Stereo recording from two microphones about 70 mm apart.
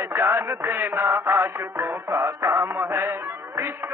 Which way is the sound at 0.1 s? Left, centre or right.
Right.